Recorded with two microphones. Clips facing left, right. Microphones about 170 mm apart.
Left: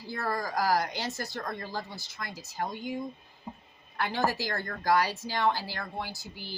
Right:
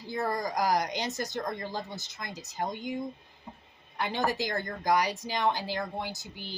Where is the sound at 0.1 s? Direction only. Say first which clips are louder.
Right 2 dB; 20° right (ahead or behind).